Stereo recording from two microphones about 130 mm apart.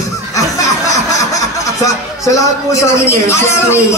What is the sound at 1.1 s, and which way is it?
A man's voice, 25° left (ahead or behind).